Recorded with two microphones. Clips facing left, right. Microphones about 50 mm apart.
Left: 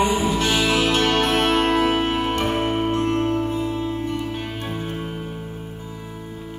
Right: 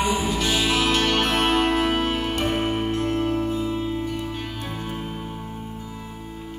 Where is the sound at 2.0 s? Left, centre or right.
Centre.